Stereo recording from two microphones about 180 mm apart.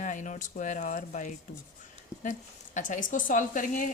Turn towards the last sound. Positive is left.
turn(degrees=50)  # may be behind; listen again after turning